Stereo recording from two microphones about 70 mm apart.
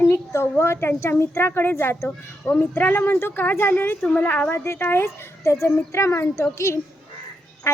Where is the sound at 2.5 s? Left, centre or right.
Left.